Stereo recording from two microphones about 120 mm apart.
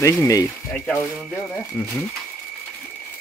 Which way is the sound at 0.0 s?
25° left (ahead or behind).